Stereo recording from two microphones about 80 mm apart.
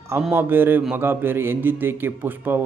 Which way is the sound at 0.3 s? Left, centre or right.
Right.